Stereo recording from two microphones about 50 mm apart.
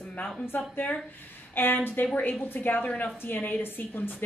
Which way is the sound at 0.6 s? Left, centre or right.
Left.